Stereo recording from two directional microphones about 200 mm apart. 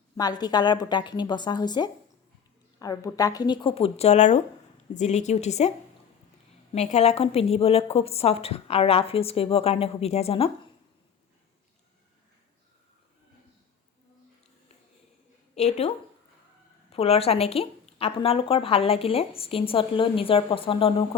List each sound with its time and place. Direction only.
0.2 s a woman's voice: 20° left (ahead or behind)
6.7 s a woman's voice: 35° left (ahead or behind)
15.6 s a woman's voice: 30° left (ahead or behind)
16.9 s a woman's voice: 30° left (ahead or behind)